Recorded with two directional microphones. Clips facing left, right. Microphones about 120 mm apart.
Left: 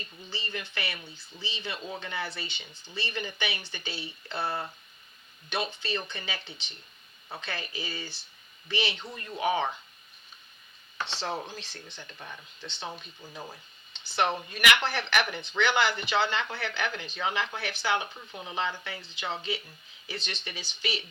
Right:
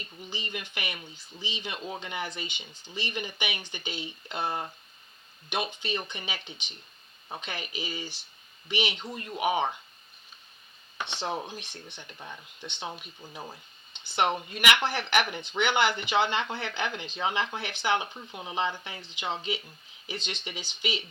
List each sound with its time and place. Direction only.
0.3 s speech: 15° right (ahead or behind)
10.9 s speech: 15° right (ahead or behind)